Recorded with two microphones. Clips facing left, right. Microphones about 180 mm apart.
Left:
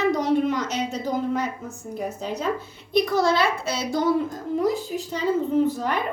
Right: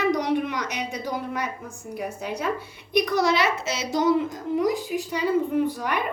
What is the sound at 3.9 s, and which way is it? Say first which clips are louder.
Child singing: right 1 dB; 20° right (ahead or behind).